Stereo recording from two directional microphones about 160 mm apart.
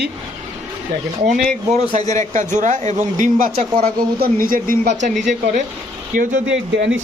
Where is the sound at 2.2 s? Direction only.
50° right (ahead or behind).